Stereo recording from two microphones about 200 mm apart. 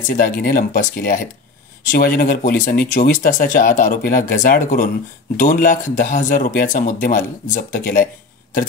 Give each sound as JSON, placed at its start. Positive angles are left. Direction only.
{"t": 0.1, "sound": "speech", "side_deg": 45}